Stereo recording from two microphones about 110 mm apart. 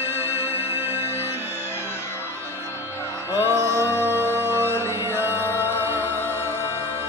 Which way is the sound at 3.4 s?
25° right (ahead or behind).